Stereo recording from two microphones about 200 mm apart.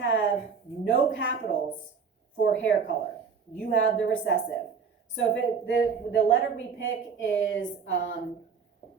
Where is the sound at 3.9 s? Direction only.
65° left (ahead or behind).